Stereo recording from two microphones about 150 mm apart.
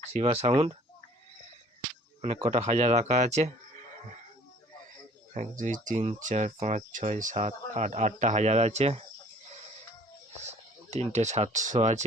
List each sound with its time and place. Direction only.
0.1 s speech: 40° right (ahead or behind)
2.2 s speech: 45° right (ahead or behind)
5.3 s speech: 55° right (ahead or behind)
10.9 s speech: 50° right (ahead or behind)